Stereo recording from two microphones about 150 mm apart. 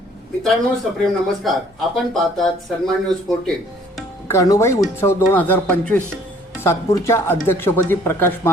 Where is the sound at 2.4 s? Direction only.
Centre (ahead or behind).